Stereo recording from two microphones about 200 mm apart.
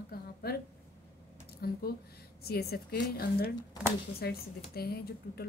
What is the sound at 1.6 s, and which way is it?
A woman's voice, 50° left (ahead or behind).